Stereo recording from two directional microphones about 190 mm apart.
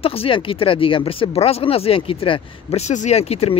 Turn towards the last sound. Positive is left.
turn(degrees=35)  # may be behind; listen again after turning